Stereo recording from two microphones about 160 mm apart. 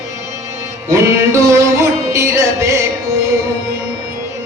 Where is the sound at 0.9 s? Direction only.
20° right (ahead or behind).